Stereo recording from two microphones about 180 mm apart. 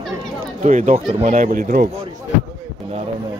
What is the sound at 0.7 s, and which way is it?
Speech, 45° right (ahead or behind).